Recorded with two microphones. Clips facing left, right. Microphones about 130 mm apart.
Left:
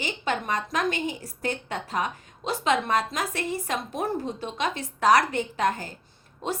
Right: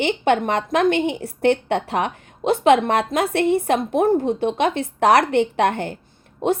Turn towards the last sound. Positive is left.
turn(degrees=-60)  # may be behind; listen again after turning